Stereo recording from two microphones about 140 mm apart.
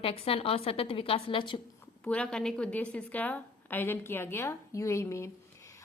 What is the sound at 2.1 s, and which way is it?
A woman's voice, 5° left (ahead or behind).